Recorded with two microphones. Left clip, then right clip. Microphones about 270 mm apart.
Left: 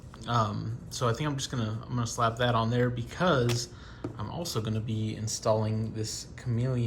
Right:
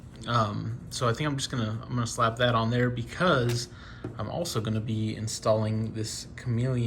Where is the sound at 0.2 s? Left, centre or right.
Centre.